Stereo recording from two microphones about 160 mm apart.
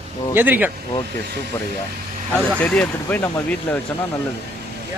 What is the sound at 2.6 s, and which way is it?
Speech, 10° left (ahead or behind).